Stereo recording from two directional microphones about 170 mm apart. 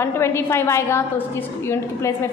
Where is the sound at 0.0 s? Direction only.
15° left (ahead or behind).